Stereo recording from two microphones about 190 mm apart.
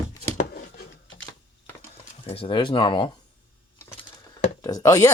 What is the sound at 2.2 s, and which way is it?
Speech, 30° left (ahead or behind).